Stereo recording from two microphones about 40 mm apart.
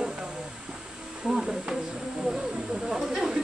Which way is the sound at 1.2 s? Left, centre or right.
Centre.